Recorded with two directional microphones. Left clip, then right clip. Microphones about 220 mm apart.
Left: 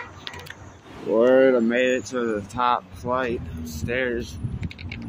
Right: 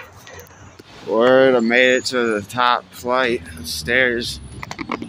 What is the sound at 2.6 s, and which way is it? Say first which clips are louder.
Speech: right 4 dB; 10° right (ahead or behind).